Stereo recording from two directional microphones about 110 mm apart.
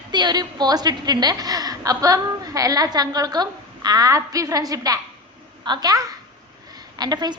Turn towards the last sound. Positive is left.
turn(degrees=-40)  # may be behind; listen again after turning